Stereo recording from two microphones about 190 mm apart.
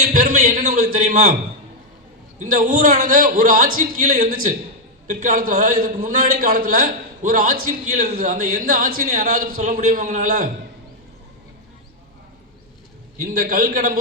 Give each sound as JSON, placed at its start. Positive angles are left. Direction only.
{"t": 0.1, "sound": "a sound", "side_deg": -45}
{"t": 2.4, "sound": "a man's voice", "side_deg": -45}
{"t": 13.1, "sound": "a man's voice", "side_deg": -50}